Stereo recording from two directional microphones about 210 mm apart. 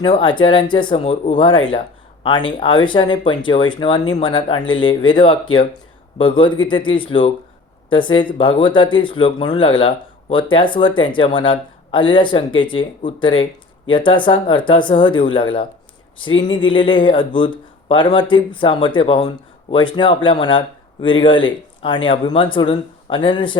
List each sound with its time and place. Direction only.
0.0 s speech: 25° left (ahead or behind)